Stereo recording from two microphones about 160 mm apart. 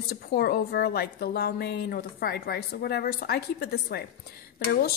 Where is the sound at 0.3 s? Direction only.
90° left.